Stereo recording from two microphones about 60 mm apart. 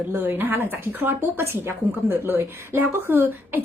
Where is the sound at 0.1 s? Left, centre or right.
Right.